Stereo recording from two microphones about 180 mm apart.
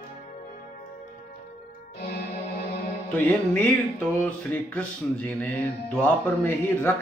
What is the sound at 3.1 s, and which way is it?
Music, 10° left (ahead or behind).